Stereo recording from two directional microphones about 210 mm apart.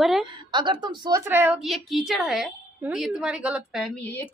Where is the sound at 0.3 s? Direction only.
20° right (ahead or behind).